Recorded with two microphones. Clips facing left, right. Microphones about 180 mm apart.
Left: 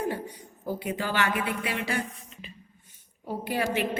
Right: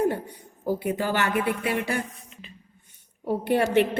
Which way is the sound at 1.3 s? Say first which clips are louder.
Right 5 dB; 60° right (ahead or behind).